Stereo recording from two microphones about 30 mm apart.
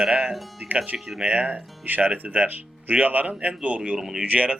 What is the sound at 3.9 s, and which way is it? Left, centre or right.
Speech, centre.